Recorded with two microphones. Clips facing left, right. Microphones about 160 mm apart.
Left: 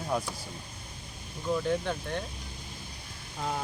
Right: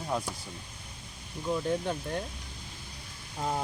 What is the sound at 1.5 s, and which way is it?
Speech, 10° right (ahead or behind).